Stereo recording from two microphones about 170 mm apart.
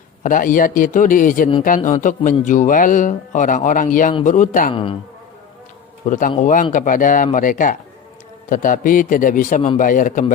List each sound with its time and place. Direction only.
0.2 s speech: 50° left (ahead or behind)
4.7 s insect: 30° left (ahead or behind)
6.1 s speech: 50° left (ahead or behind)